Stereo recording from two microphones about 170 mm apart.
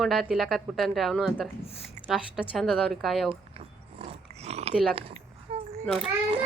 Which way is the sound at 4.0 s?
40° right (ahead or behind).